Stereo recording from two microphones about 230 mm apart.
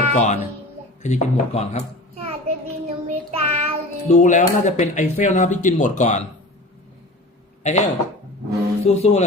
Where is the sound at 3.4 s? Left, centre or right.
Right.